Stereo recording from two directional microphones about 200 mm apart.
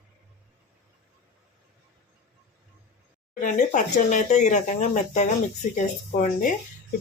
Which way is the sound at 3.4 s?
35° left (ahead or behind).